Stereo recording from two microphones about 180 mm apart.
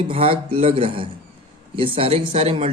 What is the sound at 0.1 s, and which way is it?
Speech, 30° right (ahead or behind).